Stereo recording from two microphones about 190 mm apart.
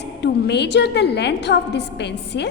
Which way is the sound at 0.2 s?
65° left (ahead or behind).